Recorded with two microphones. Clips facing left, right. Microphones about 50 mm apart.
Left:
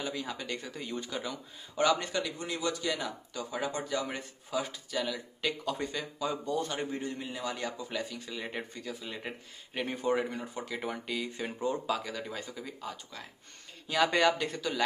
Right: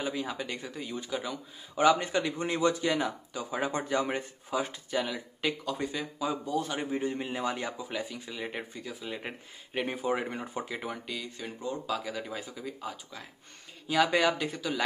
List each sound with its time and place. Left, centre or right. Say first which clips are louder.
0.0 s a man's voice: right 3 dB; centre; by 5.0 s right
5.0 s speech: right 1 dB; centre
5.6 s a man's voice: right 1 dB; centre; by 7.6 s right
7.6 s a man's voice: right 1 dB; centre
10.2 s speech: right 2 dB; right
10.7 s speech: left 1 dB; centre
11.3 s speech: left 4 dB; centre
11.9 s speech: even; centre